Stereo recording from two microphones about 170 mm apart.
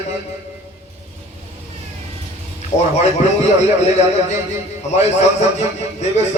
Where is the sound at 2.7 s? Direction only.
40° left (ahead or behind).